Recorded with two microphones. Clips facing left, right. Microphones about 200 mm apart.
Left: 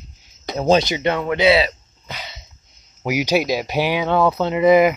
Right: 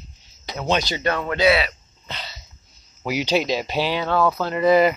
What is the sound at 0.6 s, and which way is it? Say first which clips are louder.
Speech: left 7 dB; 35° left (ahead or behind).